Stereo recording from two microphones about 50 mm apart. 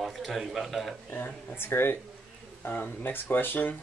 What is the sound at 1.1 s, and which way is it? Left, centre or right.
Speech, left.